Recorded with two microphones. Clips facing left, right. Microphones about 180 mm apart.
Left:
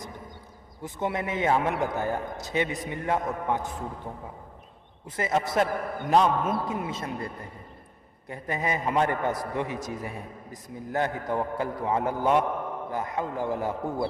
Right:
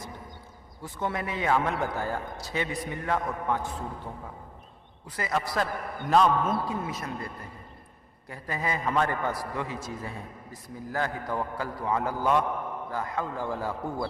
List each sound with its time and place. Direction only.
0.8 s a man's voice: 20° left (ahead or behind)
5.0 s a man's voice: 25° left (ahead or behind)
8.3 s a man's voice: 20° left (ahead or behind)